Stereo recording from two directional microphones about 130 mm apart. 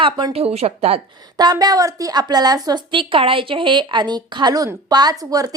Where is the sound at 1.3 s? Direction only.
30° right (ahead or behind).